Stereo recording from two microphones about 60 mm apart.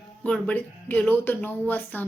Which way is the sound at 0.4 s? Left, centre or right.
Left.